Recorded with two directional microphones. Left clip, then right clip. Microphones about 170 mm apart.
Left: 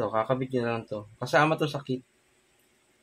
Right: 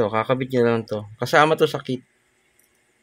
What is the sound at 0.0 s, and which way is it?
Speech, 90° right.